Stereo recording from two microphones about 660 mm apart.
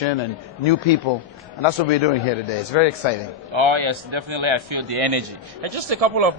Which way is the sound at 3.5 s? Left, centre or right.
Right.